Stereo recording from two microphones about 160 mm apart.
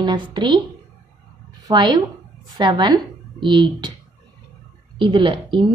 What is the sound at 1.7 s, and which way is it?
Speech, 25° right (ahead or behind).